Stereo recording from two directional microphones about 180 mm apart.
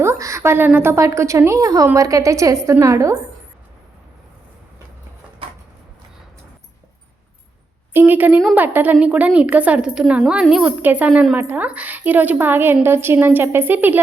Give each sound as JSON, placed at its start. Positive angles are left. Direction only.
{"t": 0.0, "sound": "a woman's voice", "side_deg": -15}
{"t": 5.4, "sound": "a sound", "side_deg": -30}
{"t": 7.9, "sound": "a woman's voice", "side_deg": -10}